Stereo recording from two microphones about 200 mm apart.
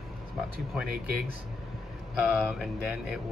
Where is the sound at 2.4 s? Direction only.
5° right (ahead or behind).